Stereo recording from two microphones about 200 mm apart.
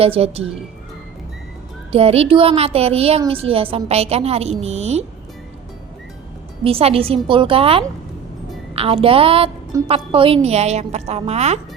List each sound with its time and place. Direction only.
0.0 s a woman's voice: 30° right (ahead or behind)
1.9 s a woman's voice: 30° right (ahead or behind)
6.7 s a woman's voice: 30° right (ahead or behind)